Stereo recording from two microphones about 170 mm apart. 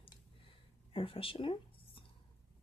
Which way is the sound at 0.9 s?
30° left (ahead or behind).